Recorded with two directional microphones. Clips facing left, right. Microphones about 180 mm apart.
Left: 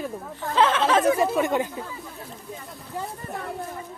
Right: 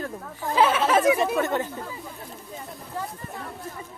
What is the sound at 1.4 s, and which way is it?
Speech, 10° left (ahead or behind).